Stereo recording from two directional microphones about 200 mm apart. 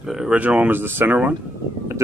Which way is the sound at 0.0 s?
Centre (ahead or behind).